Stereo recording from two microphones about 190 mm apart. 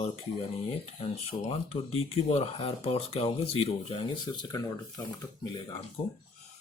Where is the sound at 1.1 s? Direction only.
30° left (ahead or behind).